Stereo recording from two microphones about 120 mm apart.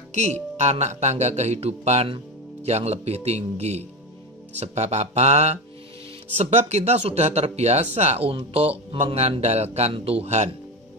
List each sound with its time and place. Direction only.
0.1 s speech: 70° right (ahead or behind)